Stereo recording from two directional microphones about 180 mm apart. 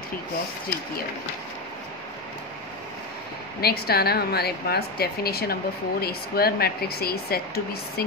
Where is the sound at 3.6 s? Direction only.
60° left (ahead or behind).